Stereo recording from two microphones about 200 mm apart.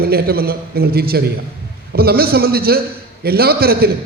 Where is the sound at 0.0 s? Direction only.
50° right (ahead or behind).